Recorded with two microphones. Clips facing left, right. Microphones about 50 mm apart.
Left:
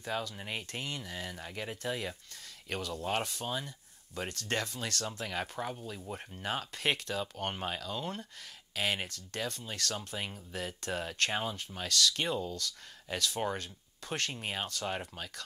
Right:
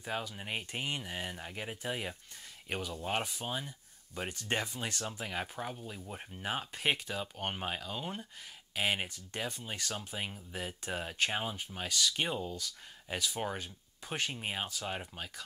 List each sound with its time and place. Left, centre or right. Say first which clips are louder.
0.0 s speech: left 2 dB; centre
5.6 s speech: left 2 dB; centre